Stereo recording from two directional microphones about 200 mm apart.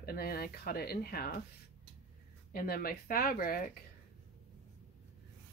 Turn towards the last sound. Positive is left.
turn(degrees=45)  # may be behind; listen again after turning